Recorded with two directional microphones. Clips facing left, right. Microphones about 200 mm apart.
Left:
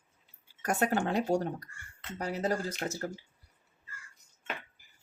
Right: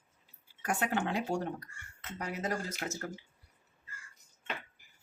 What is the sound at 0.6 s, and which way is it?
Speech, 40° left (ahead or behind).